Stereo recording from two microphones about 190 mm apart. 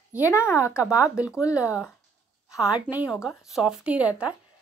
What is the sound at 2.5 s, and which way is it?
Speech, 5° right (ahead or behind).